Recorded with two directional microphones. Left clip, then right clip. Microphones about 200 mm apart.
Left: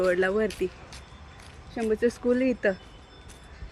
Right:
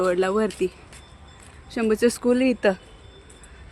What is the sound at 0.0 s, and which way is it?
Speech, 25° right (ahead or behind).